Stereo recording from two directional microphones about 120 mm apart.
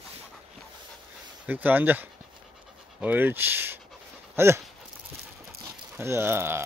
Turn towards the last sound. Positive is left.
turn(degrees=-20)  # may be behind; listen again after turning